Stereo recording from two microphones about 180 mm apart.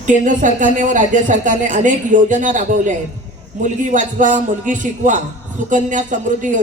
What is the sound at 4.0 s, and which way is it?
A man's voice, 45° right (ahead or behind).